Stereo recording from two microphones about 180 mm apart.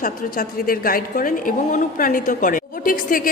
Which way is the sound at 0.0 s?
55° left (ahead or behind).